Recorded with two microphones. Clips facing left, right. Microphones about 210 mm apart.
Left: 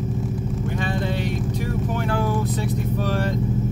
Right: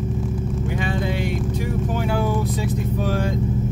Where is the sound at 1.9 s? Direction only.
10° right (ahead or behind).